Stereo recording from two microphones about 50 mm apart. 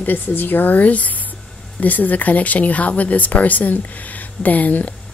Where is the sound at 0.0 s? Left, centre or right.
Left.